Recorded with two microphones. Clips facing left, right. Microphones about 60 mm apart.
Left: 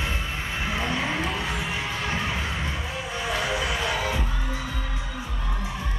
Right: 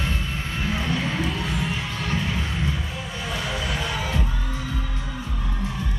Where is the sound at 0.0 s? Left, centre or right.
Centre.